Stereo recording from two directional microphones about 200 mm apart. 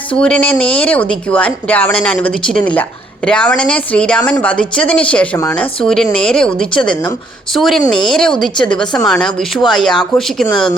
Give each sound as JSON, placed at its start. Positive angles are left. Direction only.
{"t": 0.1, "sound": "speech", "side_deg": 5}